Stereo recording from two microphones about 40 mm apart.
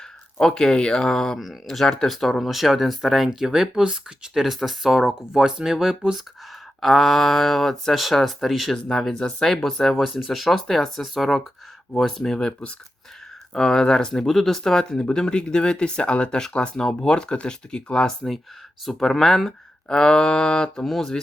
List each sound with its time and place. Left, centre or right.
0.3 s speech: centre
0.9 s speech: centre
6.8 s speech: centre
8.7 s speech: centre
9.9 s speech: centre
13.5 s speech: centre
14.3 s speech: centre
14.6 s speech: centre
18.2 s speech: centre; by 20.8 s left
20.8 s speech: centre